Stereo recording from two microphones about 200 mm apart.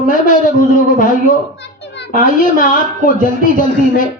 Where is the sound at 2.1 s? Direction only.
40° left (ahead or behind).